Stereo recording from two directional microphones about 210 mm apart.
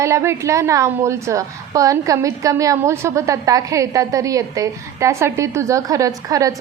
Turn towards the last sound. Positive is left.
turn(degrees=-15)  # may be behind; listen again after turning